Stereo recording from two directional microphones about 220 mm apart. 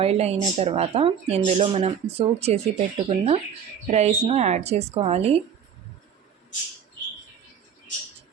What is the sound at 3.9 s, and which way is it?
Speech, 30° right (ahead or behind).